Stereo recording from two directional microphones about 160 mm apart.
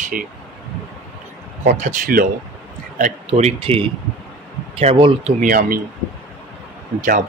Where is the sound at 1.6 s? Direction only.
50° right (ahead or behind).